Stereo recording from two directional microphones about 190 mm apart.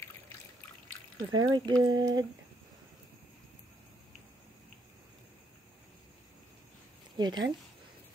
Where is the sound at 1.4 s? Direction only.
20° right (ahead or behind).